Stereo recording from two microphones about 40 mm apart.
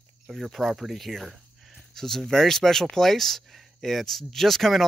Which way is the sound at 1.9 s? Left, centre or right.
Centre.